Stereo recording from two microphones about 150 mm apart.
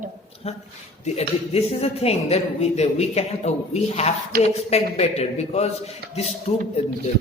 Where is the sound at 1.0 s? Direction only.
45° left (ahead or behind).